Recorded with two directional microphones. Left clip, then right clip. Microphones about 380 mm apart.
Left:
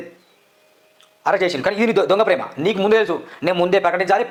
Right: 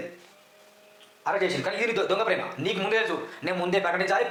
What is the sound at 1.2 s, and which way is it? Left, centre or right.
A man's voice, left.